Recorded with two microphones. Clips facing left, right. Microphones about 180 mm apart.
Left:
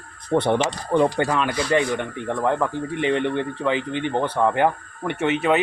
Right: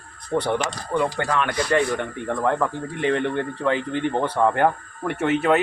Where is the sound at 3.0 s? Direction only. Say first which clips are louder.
Even; 20° left (ahead or behind).